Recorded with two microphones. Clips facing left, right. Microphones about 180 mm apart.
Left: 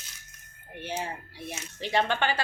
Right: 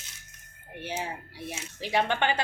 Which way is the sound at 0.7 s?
15° right (ahead or behind).